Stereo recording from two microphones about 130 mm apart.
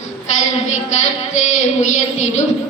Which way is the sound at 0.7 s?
65° left (ahead or behind).